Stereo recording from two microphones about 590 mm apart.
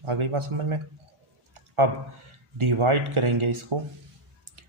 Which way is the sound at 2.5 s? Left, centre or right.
Right.